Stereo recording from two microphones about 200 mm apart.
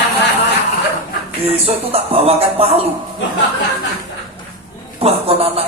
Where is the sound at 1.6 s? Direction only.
30° right (ahead or behind).